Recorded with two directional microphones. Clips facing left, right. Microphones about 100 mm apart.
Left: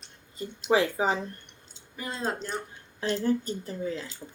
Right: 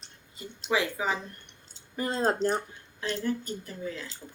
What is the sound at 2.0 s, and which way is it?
Speech, 35° right (ahead or behind).